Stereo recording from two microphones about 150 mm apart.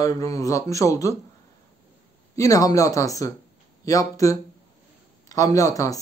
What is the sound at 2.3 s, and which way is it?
Speech, 25° left (ahead or behind).